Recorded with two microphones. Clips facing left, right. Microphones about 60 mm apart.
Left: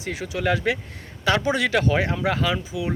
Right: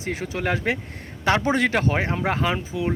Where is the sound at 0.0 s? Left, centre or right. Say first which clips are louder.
Left 1 dB; right.